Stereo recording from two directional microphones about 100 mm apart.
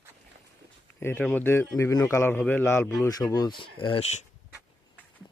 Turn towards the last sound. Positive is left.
turn(degrees=75)  # may be behind; listen again after turning